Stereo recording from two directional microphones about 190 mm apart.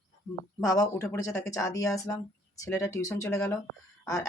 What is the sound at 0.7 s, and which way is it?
Speech, 15° left (ahead or behind).